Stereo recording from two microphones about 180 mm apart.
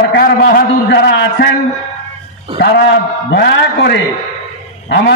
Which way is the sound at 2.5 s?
65° left (ahead or behind).